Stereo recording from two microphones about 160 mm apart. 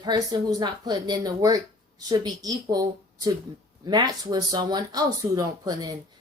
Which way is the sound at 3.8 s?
25° right (ahead or behind).